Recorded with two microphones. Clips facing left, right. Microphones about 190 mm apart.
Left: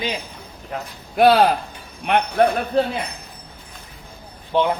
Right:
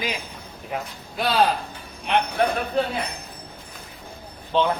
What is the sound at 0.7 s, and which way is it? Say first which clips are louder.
Speech: even; 10° right (ahead or behind).